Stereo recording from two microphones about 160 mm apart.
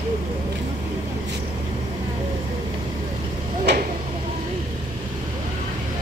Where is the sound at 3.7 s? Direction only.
90° right.